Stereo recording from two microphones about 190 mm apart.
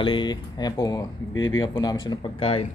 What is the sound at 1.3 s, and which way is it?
Speech, 90° left.